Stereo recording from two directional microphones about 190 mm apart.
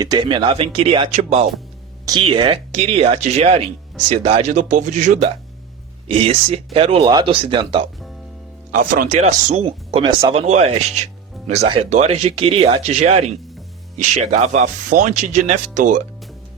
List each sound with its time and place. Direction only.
0.0 s speech: 25° right (ahead or behind)
8.7 s speech: 45° right (ahead or behind)
9.2 s speech: 35° right (ahead or behind)
10.4 s speech: 35° right (ahead or behind)